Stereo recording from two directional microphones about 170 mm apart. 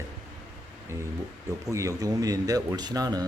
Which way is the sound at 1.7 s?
20° right (ahead or behind).